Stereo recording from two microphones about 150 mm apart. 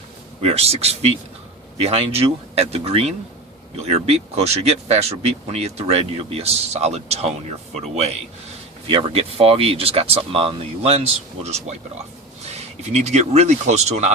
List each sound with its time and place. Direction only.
0.4 s speech: 45° right (ahead or behind)